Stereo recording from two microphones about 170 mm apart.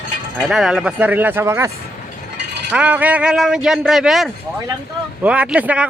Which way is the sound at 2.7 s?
10° right (ahead or behind).